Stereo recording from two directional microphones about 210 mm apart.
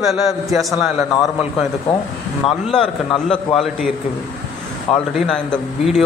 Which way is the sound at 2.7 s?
5° left (ahead or behind).